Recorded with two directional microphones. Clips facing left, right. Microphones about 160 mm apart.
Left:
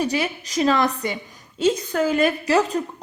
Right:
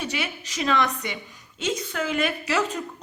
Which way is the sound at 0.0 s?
35° left (ahead or behind).